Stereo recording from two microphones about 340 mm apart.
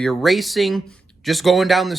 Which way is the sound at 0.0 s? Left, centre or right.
Centre.